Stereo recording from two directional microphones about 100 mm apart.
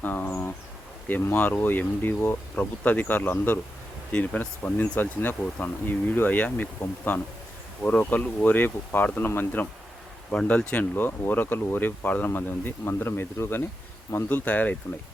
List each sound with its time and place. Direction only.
0.0 s speech: 15° left (ahead or behind)